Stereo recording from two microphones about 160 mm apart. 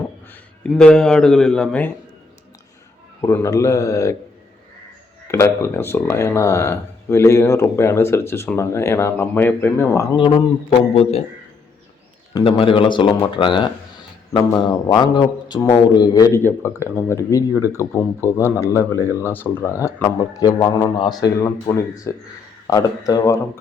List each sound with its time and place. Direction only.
0.7 s speech: 5° left (ahead or behind)
3.2 s speech: 20° left (ahead or behind)
5.3 s speech: 15° left (ahead or behind)
10.2 s speech: 30° left (ahead or behind)
12.3 s speech: 35° left (ahead or behind)